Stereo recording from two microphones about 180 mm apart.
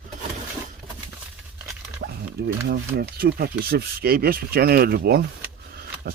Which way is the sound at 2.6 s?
65° right (ahead or behind).